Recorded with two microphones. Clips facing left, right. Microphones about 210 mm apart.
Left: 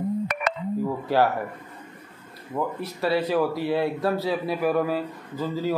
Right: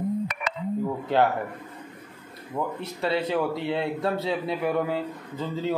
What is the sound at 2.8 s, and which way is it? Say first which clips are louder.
A man's voice: left 3 dB; 25° right (ahead or behind).